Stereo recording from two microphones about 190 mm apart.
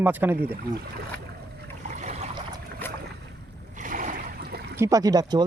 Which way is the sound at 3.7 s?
45° right (ahead or behind).